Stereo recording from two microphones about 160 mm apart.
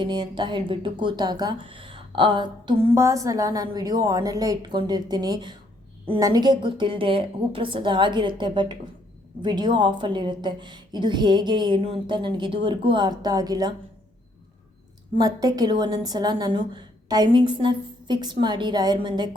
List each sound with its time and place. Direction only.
0.0 s a woman's voice: 30° right (ahead or behind)
2.9 s a woman's voice: 20° right (ahead or behind)
15.1 s a woman's voice: 25° right (ahead or behind)